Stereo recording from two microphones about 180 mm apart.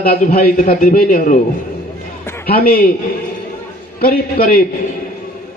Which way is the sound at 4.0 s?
55° left (ahead or behind).